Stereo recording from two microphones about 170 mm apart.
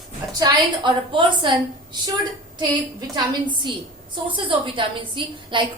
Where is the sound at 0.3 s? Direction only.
25° right (ahead or behind).